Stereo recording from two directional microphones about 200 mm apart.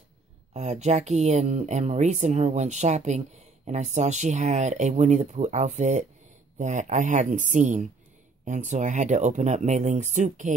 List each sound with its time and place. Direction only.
0.5 s speech: 35° right (ahead or behind)